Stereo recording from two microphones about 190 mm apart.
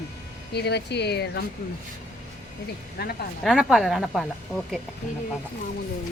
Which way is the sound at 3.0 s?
55° left (ahead or behind).